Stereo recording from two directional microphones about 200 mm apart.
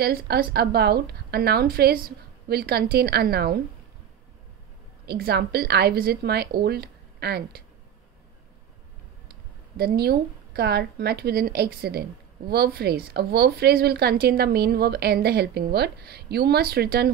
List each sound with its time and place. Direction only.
0.0 s a woman's voice: 50° right (ahead or behind)
5.0 s a woman's voice: 55° right (ahead or behind)
9.3 s a sound: 50° right (ahead or behind)
10.5 s a woman's voice: 55° right (ahead or behind)